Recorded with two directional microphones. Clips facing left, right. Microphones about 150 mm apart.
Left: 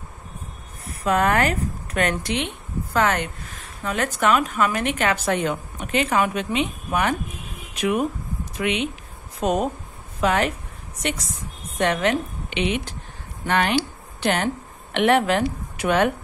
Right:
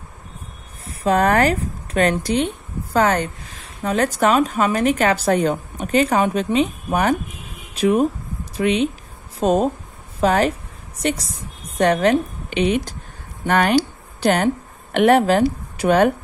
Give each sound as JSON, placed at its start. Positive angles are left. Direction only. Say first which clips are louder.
{"t": 0.8, "sound": "a woman's voice", "louder": "right 3 dB", "side_deg": -35}